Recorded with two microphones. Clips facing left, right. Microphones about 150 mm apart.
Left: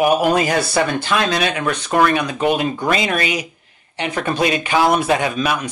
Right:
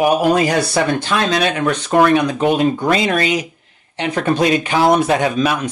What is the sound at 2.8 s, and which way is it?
Speech, 10° left (ahead or behind).